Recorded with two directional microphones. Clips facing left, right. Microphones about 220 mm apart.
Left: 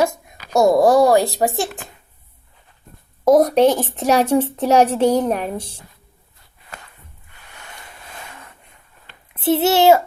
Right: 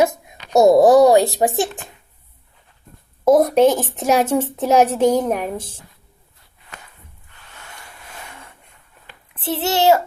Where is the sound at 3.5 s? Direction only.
10° right (ahead or behind).